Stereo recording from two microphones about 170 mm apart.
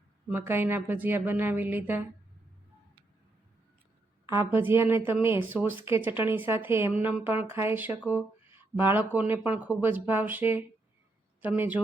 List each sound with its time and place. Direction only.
0.3 s a woman's voice: 10° right (ahead or behind)
4.3 s a woman's voice: 15° right (ahead or behind)